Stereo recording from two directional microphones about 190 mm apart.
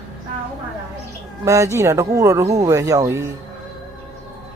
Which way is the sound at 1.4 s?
15° right (ahead or behind).